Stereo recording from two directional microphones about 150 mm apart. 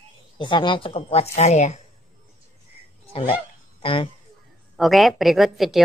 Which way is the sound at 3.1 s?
40° left (ahead or behind).